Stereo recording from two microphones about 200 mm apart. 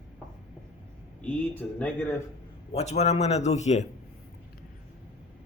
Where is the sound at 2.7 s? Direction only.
35° left (ahead or behind).